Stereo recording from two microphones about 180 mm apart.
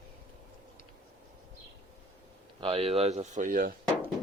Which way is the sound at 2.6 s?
35° right (ahead or behind).